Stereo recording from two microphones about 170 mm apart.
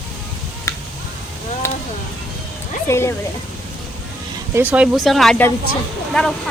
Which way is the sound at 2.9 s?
15° left (ahead or behind).